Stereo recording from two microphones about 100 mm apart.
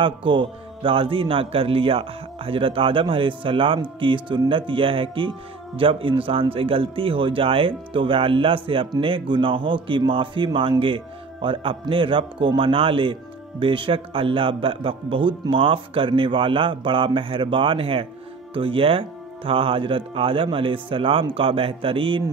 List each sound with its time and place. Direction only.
0.0 s speech: 55° right (ahead or behind)